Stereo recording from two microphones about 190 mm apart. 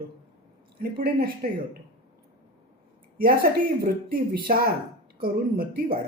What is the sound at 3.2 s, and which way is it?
Speech, 50° right (ahead or behind).